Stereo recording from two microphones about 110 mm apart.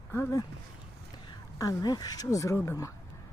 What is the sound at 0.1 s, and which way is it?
Speech, 25° left (ahead or behind).